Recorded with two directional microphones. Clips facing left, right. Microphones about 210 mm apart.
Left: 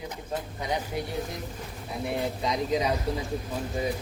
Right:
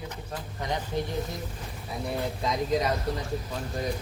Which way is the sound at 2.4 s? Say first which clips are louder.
Right 1 dB; centre (ahead or behind).